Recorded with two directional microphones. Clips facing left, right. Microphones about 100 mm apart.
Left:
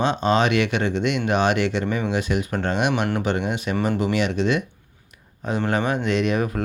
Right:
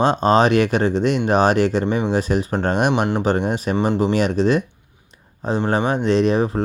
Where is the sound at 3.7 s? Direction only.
25° right (ahead or behind).